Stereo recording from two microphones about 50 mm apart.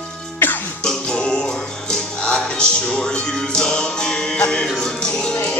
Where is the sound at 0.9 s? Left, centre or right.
Centre.